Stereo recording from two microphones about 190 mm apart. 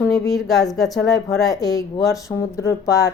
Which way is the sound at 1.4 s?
20° left (ahead or behind).